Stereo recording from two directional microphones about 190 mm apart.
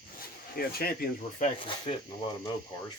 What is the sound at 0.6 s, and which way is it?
Speech, 50° left (ahead or behind).